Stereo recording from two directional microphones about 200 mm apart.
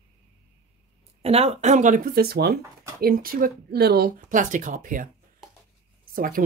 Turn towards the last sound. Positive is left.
turn(degrees=-45)  # may be behind; listen again after turning